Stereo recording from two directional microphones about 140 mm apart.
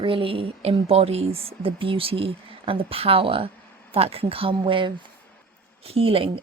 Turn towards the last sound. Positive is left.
turn(degrees=-40)  # may be behind; listen again after turning